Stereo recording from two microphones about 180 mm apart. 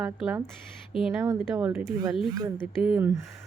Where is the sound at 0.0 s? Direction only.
Centre (ahead or behind).